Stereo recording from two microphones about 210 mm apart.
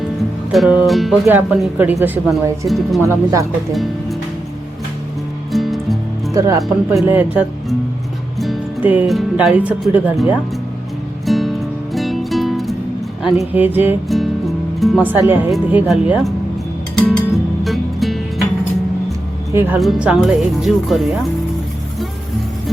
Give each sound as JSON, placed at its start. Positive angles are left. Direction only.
{"t": 0.5, "sound": "speech", "side_deg": -5}
{"t": 3.0, "sound": "speech", "side_deg": -15}
{"t": 5.5, "sound": "music", "side_deg": 0}
{"t": 6.3, "sound": "speech", "side_deg": -15}
{"t": 6.6, "sound": "speech", "side_deg": 0}
{"t": 11.3, "sound": "music", "side_deg": 0}
{"t": 13.2, "sound": "speech", "side_deg": 0}
{"t": 17.1, "sound": "music", "side_deg": 0}
{"t": 19.5, "sound": "speech", "side_deg": -10}